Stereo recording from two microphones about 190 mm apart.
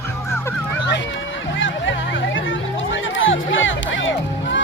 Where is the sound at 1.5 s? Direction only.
80° left.